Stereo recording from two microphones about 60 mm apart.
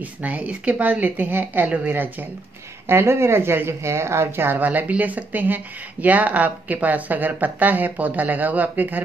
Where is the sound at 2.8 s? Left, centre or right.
Right.